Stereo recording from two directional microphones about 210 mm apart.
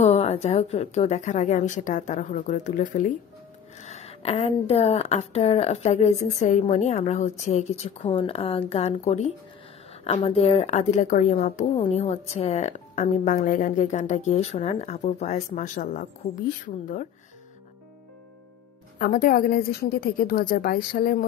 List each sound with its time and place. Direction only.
0.0 s a woman's voice: 30° left (ahead or behind)
18.9 s a woman's voice: 40° left (ahead or behind)